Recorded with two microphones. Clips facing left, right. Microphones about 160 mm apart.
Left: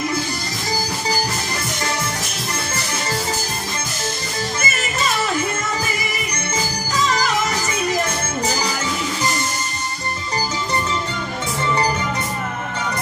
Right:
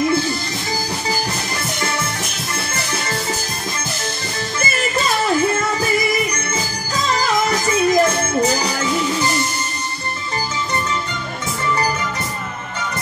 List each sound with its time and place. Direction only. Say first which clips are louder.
4.6 s music: right 4 dB; 35° right (ahead or behind)
7.4 s music: right 5 dB; 35° right (ahead or behind)